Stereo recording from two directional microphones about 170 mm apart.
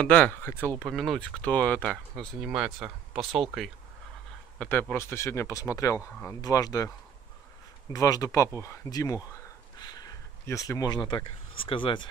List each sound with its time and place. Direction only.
0.0 s speech: 10° left (ahead or behind)
7.9 s speech: 20° left (ahead or behind)